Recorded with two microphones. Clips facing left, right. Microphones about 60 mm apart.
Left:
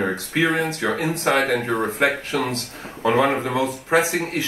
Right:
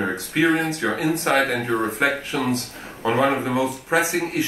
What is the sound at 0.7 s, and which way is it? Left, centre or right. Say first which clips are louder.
Speech: right 1 dB; left.